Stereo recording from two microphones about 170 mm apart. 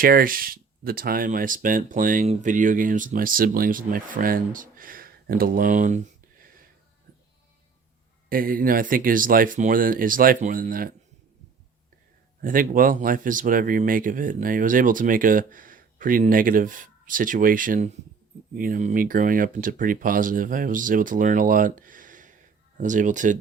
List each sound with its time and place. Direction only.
0.0 s speech: 60° right (ahead or behind)
8.3 s speech: 55° right (ahead or behind)
12.4 s speech: 55° right (ahead or behind)